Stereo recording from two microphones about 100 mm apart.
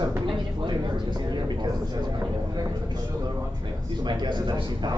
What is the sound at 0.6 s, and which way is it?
A man's voice, 50° right (ahead or behind).